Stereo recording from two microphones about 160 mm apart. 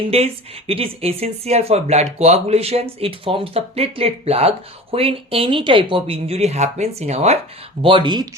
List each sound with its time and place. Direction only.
0.1 s speech: 35° right (ahead or behind)
7.8 s speech: 30° right (ahead or behind)